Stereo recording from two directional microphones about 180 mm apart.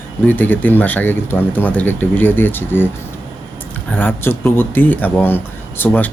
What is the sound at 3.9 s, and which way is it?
Speech, 10° left (ahead or behind).